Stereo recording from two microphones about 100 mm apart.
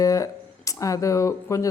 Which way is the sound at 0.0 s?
35° left (ahead or behind).